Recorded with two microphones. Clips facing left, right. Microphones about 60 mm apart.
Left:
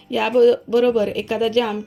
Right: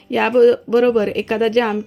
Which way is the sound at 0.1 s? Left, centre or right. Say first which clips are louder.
Right 2 dB; right.